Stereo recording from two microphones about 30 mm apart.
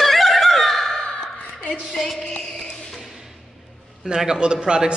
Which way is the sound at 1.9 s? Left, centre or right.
Centre.